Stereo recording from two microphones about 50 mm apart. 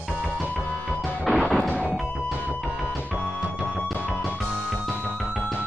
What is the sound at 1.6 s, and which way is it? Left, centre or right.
Music, left.